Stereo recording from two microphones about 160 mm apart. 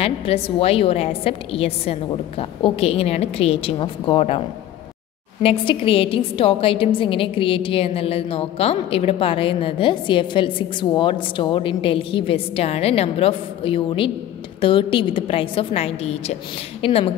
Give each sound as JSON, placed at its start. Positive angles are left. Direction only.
{"t": 0.0, "sound": "a woman's voice", "side_deg": 35}
{"t": 5.4, "sound": "a woman's voice", "side_deg": 35}